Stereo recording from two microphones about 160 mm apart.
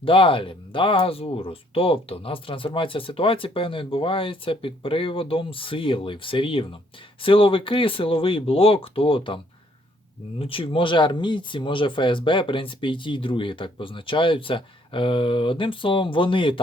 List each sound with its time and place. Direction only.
0.0 s speech: 35° left (ahead or behind)